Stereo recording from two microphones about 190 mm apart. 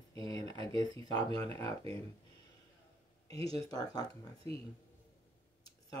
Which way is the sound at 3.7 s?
20° left (ahead or behind).